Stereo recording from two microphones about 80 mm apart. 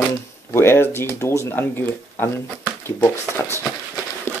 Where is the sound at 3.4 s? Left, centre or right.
Left.